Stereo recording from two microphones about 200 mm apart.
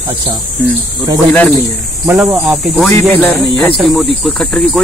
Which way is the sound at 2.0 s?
10° right (ahead or behind).